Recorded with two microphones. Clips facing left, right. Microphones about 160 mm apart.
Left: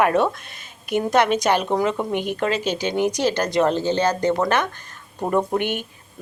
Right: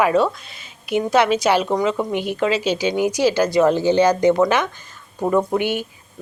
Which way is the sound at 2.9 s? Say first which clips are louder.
Right 2 dB; 10° right (ahead or behind).